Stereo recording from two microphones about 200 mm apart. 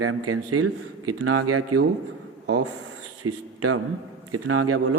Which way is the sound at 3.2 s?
90° right.